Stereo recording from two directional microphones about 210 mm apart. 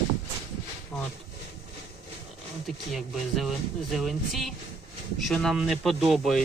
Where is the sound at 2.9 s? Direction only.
Centre (ahead or behind).